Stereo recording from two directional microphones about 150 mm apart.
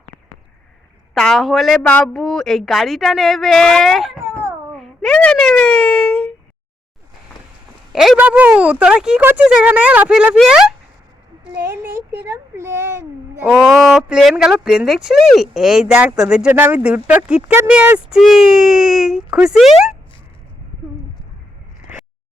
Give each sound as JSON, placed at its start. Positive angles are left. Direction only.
{"t": 1.1, "sound": "speech", "side_deg": 0}
{"t": 4.7, "sound": "wail", "side_deg": 5}
{"t": 7.9, "sound": "speech", "side_deg": -5}
{"t": 11.6, "sound": "speech", "side_deg": -15}
{"t": 13.4, "sound": "speech", "side_deg": 0}